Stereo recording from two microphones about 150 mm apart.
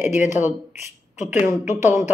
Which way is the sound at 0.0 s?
15° right (ahead or behind).